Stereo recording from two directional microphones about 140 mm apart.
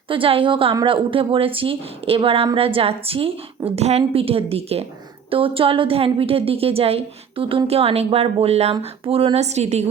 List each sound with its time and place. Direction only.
0.1 s a woman's voice: 40° right (ahead or behind)